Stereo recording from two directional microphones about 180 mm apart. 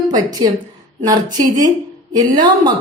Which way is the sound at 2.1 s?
20° right (ahead or behind).